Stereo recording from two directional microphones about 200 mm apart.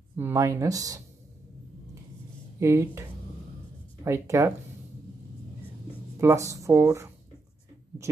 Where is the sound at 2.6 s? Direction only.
15° right (ahead or behind).